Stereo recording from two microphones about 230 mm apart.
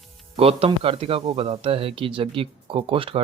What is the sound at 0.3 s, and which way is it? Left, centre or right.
Speech, right.